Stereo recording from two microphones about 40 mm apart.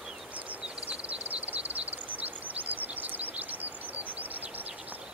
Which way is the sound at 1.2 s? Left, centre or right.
Right.